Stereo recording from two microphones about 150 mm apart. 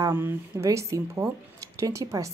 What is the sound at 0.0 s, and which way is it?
Speech, 15° right (ahead or behind).